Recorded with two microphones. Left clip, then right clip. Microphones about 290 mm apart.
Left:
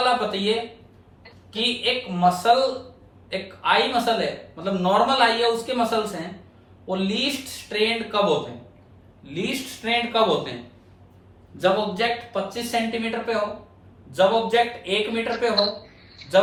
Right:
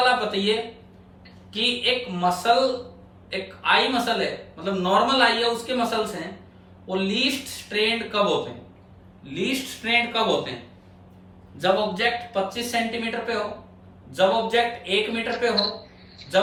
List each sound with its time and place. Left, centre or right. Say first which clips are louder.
0.3 s speech: even; centre
1.5 s a man's voice: right 1 dB; left
9.3 s a man's voice: right 1 dB; centre
11.5 s a man's voice: left 1 dB; centre
16.1 s a sound: left 3 dB; centre